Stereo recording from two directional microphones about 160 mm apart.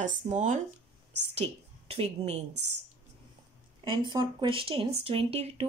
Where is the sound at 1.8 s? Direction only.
40° right (ahead or behind).